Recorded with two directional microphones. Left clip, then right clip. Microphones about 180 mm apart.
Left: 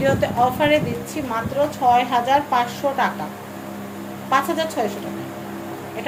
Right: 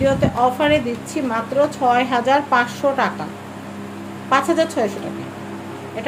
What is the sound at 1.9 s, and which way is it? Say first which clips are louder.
A woman's voice: left 3 dB; 35° right (ahead or behind).